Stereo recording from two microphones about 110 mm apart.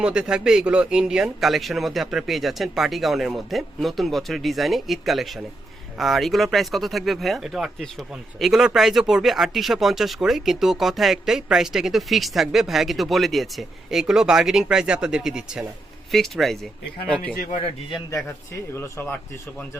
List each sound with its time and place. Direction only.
0.0 s speech: 10° right (ahead or behind); by 17.3 s 10° left (ahead or behind)
18.7 s speech: 25° left (ahead or behind)